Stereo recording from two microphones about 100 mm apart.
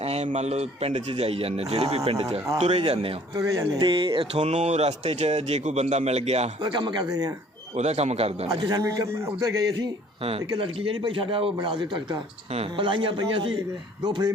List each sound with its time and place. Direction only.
0.0 s speech: 90° right
1.2 s a man's voice: 80° right
2.6 s a man's voice: 90° right
2.9 s speech: 70° right (ahead or behind)
3.3 s a man's voice: 35° right (ahead or behind)
3.8 s a man's voice: 55° right (ahead or behind)
4.4 s a man's voice: 90° right
6.6 s speech: 45° right (ahead or behind)
7.9 s a man's voice: 90° right
8.4 s a man's voice: 40° right (ahead or behind)
10.6 s a man's voice: 60° right (ahead or behind)
14.0 s speech: 45° right (ahead or behind)